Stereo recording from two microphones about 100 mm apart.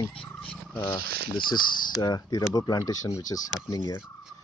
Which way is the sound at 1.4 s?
50° left (ahead or behind).